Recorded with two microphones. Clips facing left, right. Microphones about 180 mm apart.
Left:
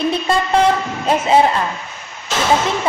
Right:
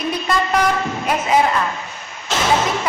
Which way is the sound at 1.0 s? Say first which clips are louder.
Left 4 dB; 30° left (ahead or behind).